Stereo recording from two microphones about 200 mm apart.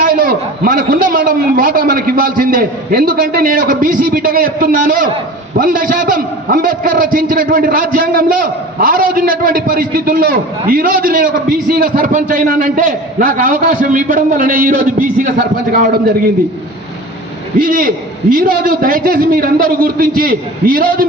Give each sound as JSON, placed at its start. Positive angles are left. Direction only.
{"t": 0.0, "sound": "a man's voice", "side_deg": -45}
{"t": 17.6, "sound": "a man's voice", "side_deg": -45}